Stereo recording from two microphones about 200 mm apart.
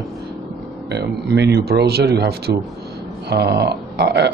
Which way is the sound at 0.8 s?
55° right (ahead or behind).